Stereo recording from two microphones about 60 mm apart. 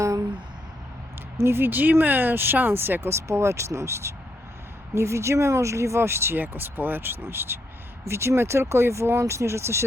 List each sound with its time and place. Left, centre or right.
1.4 s speech: right